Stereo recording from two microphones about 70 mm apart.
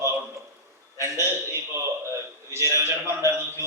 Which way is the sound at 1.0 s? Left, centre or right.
Right.